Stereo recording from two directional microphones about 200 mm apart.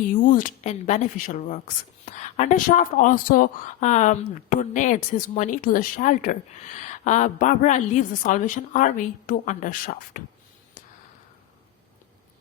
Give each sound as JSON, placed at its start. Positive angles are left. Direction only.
{"t": 0.1, "sound": "speech", "side_deg": 40}